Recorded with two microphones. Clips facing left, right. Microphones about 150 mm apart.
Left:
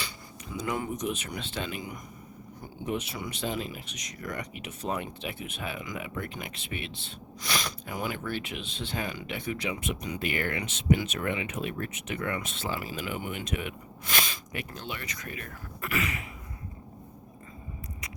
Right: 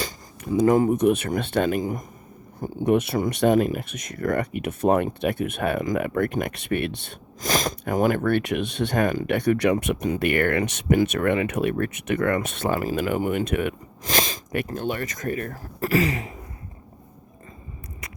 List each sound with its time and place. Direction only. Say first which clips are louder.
0.0 s speech: right 9 dB; 45° right (ahead or behind)
11.1 s speech: right 10 dB; 60° right (ahead or behind)
14.0 s a sound: right 8 dB; 40° right (ahead or behind)
14.5 s speech: right 13 dB; 55° right (ahead or behind); by 16.3 s 35° right (ahead or behind)